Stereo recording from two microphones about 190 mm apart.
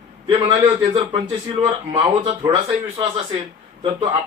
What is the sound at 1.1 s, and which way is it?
Speech, 20° right (ahead or behind).